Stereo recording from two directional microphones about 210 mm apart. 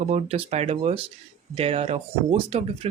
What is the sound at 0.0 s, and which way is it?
Speech, 30° right (ahead or behind).